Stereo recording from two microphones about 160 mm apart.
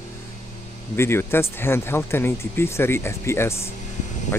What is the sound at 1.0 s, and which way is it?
Speech, 15° left (ahead or behind).